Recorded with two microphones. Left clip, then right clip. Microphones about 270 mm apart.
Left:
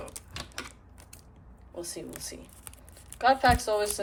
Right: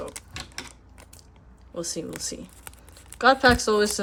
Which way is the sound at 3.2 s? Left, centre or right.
Right.